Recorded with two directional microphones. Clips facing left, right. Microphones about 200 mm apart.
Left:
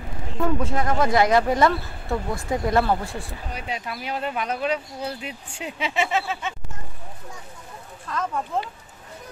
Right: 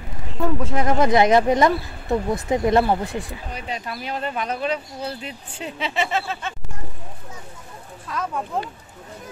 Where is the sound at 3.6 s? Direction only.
10° left (ahead or behind).